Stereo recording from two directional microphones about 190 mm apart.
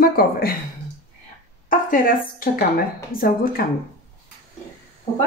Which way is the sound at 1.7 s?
45° left (ahead or behind).